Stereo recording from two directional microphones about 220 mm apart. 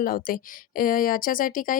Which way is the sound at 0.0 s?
40° left (ahead or behind).